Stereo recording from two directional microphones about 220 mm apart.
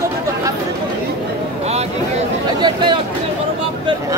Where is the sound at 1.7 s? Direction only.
25° right (ahead or behind).